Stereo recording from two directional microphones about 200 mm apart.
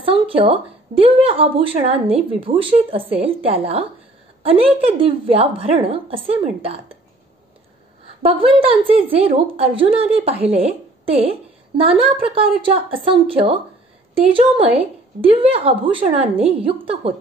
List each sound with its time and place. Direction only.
0.0 s a woman's voice: 25° right (ahead or behind)
8.2 s a woman's voice: 30° right (ahead or behind)